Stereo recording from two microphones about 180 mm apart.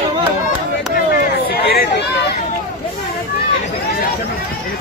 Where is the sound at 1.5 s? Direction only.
55° left (ahead or behind).